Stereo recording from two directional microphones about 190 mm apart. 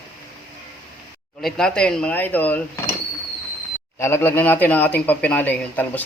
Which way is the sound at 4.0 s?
10° left (ahead or behind).